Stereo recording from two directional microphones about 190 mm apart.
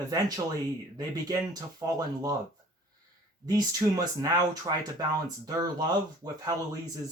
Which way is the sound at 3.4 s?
20° right (ahead or behind).